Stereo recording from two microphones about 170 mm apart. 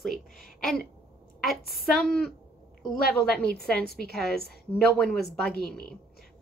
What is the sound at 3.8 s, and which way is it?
Speech, 70° left (ahead or behind).